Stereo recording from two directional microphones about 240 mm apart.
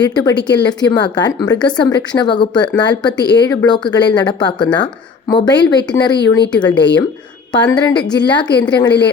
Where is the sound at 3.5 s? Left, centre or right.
Centre.